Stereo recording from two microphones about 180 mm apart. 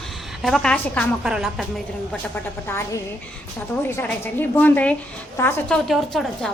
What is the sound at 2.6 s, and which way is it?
A woman's voice, 15° left (ahead or behind).